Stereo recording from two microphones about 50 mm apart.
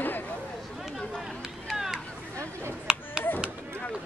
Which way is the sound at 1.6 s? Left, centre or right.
Centre.